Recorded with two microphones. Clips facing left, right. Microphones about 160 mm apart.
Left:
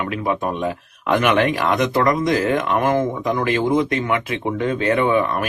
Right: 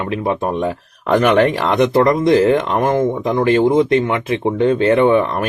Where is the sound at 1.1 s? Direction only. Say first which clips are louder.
Right 4 dB; 35° right (ahead or behind).